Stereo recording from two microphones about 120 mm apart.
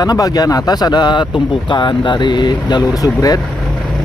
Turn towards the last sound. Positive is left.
turn(degrees=30)  # may be behind; listen again after turning